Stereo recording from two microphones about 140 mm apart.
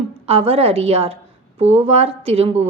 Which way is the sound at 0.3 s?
45° right (ahead or behind).